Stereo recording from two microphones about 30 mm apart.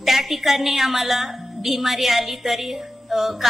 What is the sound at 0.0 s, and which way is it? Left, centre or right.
A woman's voice, centre.